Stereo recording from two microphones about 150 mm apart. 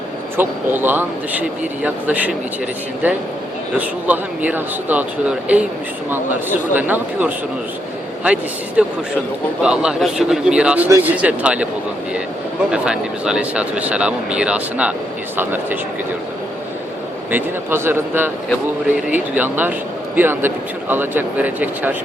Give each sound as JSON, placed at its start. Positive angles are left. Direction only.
{"t": 0.3, "sound": "speech", "side_deg": -15}
{"t": 3.8, "sound": "a man's voice", "side_deg": -10}
{"t": 12.7, "sound": "speech", "side_deg": -5}
{"t": 17.3, "sound": "speech", "side_deg": -15}